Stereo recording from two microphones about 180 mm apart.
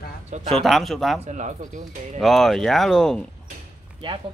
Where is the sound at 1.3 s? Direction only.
40° right (ahead or behind).